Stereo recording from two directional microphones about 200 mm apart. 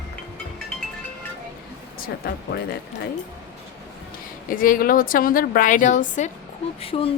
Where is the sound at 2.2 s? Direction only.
50° left (ahead or behind).